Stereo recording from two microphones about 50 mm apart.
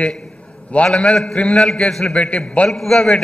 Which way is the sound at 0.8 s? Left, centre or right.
Centre.